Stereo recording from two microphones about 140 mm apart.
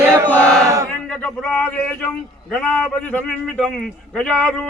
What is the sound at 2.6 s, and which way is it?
A man's voice, 10° left (ahead or behind).